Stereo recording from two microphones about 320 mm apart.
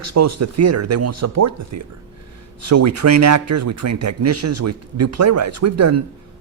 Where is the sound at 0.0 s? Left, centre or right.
Right.